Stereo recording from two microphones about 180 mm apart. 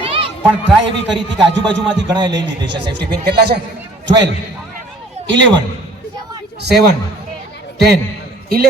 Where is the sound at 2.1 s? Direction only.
25° right (ahead or behind).